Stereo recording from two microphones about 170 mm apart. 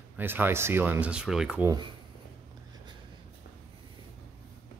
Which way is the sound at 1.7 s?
25° right (ahead or behind).